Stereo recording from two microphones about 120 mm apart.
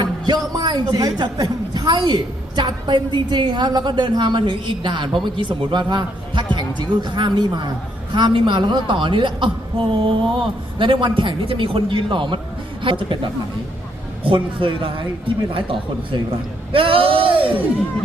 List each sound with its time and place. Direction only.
0.0 s a man's voice: 35° right (ahead or behind)
14.3 s a woman's voice: 45° right (ahead or behind)